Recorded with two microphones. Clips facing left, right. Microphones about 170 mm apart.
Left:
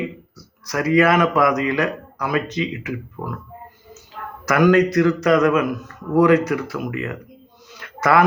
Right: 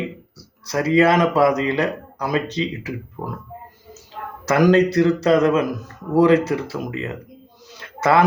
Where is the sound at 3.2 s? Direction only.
15° right (ahead or behind).